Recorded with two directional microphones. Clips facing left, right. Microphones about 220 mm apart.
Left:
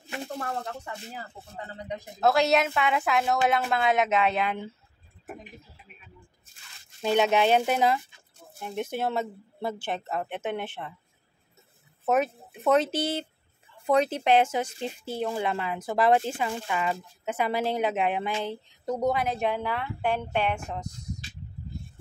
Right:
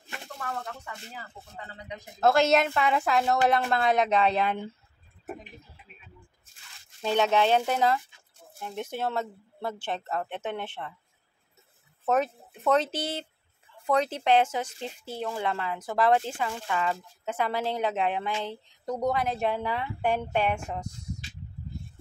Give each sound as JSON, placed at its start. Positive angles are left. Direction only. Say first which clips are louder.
{"t": 0.4, "sound": "speech", "louder": "left 3 dB", "side_deg": 35}
{"t": 2.1, "sound": "a woman's voice", "louder": "right 1 dB", "side_deg": 0}
{"t": 7.0, "sound": "speech", "louder": "left 1 dB", "side_deg": 15}
{"t": 12.1, "sound": "speech", "louder": "left 1 dB", "side_deg": 5}